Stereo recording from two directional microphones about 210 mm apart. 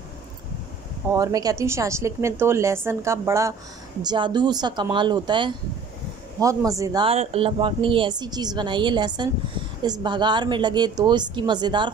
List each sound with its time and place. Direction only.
1.1 s a woman's voice: 15° right (ahead or behind)